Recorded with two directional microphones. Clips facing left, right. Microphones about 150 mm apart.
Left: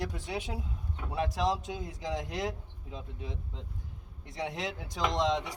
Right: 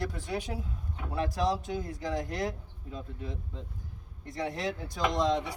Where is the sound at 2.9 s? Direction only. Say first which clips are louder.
Right 2 dB; 50° right (ahead or behind).